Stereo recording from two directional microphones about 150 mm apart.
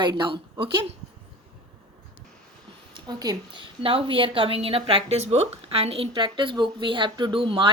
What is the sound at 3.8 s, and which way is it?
A woman's voice, 35° right (ahead or behind).